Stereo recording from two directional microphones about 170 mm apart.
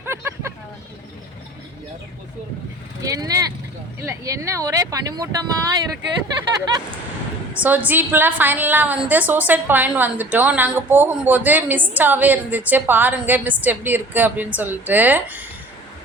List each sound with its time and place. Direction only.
0.0 s vehicle: 15° right (ahead or behind)
3.0 s vehicle: 20° right (ahead or behind)
4.0 s speech: 15° right (ahead or behind)
7.5 s a woman's voice: 10° right (ahead or behind)